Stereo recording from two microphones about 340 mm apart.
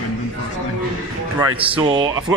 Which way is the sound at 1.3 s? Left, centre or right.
Centre.